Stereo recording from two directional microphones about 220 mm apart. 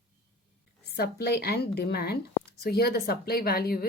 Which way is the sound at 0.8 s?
45° left (ahead or behind).